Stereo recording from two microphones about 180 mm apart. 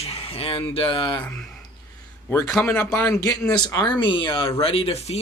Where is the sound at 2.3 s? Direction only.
10° left (ahead or behind); by 5.2 s 35° left (ahead or behind).